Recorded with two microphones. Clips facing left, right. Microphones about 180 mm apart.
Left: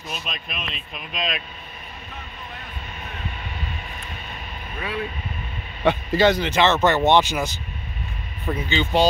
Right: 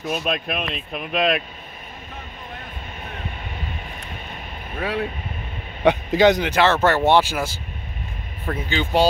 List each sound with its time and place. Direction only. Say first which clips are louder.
0.1 s speech: right 10 dB; 55° right (ahead or behind)
4.7 s speech: right 4 dB; 70° right (ahead or behind)
5.8 s a man's voice: right 2 dB; 15° right (ahead or behind)